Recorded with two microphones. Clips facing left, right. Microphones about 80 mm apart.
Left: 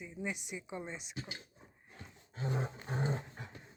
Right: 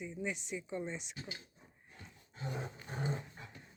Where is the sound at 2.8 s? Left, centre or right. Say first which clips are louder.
Left 3 dB; left.